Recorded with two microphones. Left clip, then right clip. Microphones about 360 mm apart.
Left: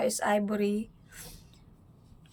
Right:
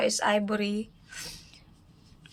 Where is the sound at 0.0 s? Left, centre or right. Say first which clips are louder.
Right 2 dB; centre.